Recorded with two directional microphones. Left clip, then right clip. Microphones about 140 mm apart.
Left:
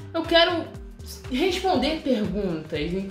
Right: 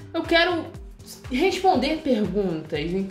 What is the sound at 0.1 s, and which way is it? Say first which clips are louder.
A woman's voice: left 1 dB; 40° right (ahead or behind).